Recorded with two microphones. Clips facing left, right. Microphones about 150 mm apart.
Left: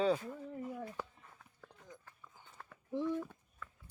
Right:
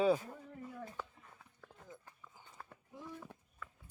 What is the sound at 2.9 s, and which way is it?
Speech, 90° left.